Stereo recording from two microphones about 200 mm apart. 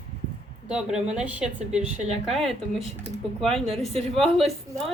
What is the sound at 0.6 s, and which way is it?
A woman's voice, 5° right (ahead or behind).